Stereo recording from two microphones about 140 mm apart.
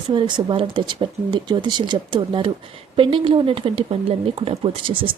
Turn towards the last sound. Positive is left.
turn(degrees=-40)  # may be behind; listen again after turning